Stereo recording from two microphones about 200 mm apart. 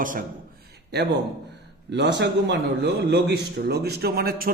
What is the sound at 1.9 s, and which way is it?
A man's voice, 60° right (ahead or behind).